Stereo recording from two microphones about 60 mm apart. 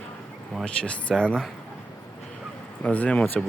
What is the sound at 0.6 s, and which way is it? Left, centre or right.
Speech, centre.